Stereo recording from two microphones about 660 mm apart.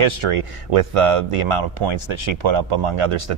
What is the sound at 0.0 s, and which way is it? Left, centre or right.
Speech, right.